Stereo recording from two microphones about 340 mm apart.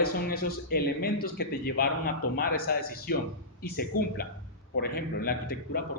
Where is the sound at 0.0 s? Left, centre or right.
Left.